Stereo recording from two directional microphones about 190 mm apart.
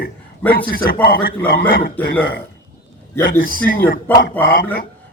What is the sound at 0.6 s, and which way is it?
Speech, 50° left (ahead or behind).